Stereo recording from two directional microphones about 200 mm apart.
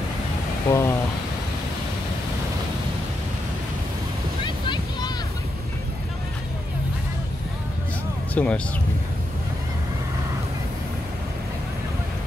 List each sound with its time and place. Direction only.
0.7 s speech: 15° left (ahead or behind)
4.5 s a sound: 25° left (ahead or behind)
8.4 s speech: 10° left (ahead or behind)